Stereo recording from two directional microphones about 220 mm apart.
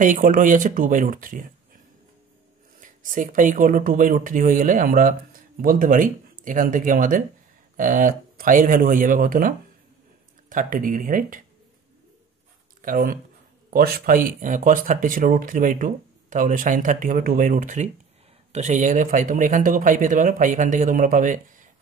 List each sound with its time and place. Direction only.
0.0 s speech: 35° right (ahead or behind)
2.8 s speech: 35° right (ahead or behind)
12.8 s speech: 40° right (ahead or behind)